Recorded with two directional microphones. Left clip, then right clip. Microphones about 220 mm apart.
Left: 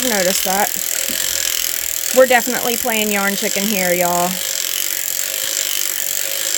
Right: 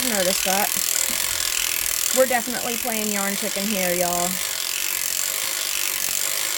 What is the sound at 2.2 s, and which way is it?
Speech, 45° left (ahead or behind).